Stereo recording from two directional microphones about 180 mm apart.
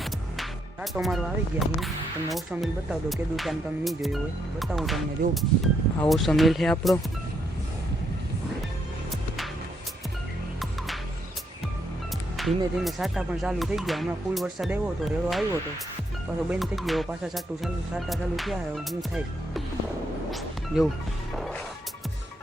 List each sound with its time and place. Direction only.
0.0 s music: 5° right (ahead or behind)
2.3 s speech: centre (ahead or behind)
5.2 s speech: 55° right (ahead or behind)
6.0 s speech: centre (ahead or behind)
12.4 s speech: centre (ahead or behind)
16.5 s speech: centre (ahead or behind)
20.3 s music: centre (ahead or behind)
21.3 s speech: centre (ahead or behind)